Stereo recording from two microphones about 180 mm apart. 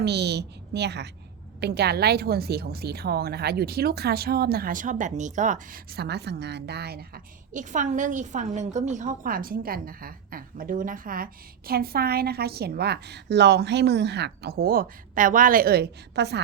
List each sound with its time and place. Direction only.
0.0 s a woman's voice: 65° right (ahead or behind)